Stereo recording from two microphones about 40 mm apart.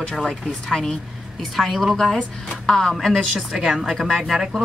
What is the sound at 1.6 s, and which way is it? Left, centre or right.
Chopping, centre.